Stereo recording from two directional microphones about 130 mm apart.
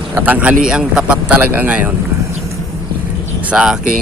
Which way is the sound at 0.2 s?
10° right (ahead or behind).